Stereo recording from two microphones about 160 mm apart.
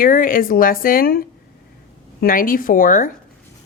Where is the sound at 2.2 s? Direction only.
60° left (ahead or behind).